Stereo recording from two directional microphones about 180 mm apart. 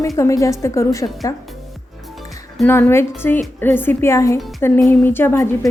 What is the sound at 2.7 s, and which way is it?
A woman's voice, 10° left (ahead or behind).